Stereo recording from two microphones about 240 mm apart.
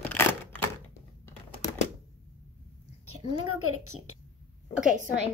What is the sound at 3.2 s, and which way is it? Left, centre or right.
Speech, right.